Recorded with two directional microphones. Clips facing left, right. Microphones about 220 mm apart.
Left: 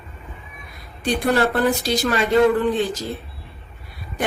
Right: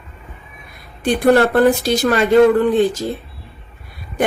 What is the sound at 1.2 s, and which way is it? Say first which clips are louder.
Speech: right 7 dB; 55° right (ahead or behind).